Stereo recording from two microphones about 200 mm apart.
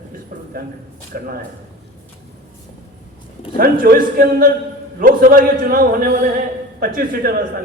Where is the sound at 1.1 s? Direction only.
50° right (ahead or behind).